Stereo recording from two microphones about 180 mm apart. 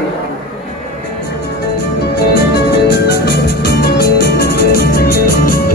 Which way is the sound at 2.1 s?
60° left (ahead or behind).